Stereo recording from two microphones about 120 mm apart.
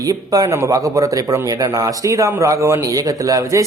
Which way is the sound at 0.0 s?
30° right (ahead or behind).